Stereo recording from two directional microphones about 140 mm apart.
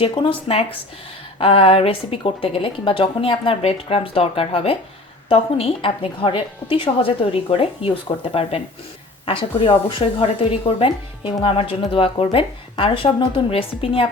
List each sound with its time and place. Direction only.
0.0 s a woman's voice: 40° left (ahead or behind)